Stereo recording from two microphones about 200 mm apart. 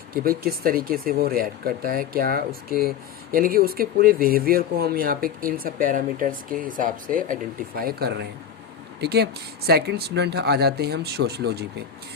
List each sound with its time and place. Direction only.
0.1 s speech: 45° right (ahead or behind)